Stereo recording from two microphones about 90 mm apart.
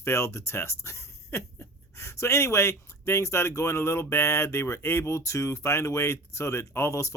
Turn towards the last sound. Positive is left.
turn(degrees=30)  # may be behind; listen again after turning